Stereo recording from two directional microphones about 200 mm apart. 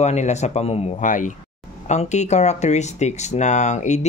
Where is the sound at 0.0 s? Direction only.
35° left (ahead or behind).